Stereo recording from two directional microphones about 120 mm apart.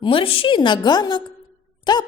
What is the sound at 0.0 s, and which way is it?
A woman's voice, 45° left (ahead or behind).